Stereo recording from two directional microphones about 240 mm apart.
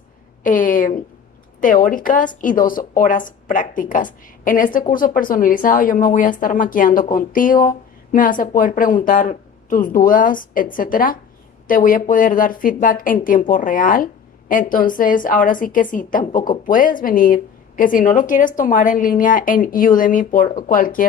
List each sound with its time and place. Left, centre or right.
0.4 s speech: left